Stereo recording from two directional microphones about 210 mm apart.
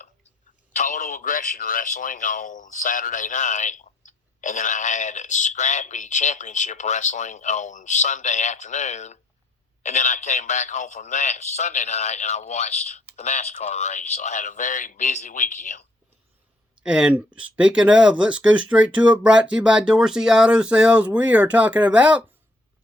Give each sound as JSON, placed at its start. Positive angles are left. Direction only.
{"t": 0.7, "sound": "speech", "side_deg": 35}
{"t": 16.8, "sound": "speech", "side_deg": -5}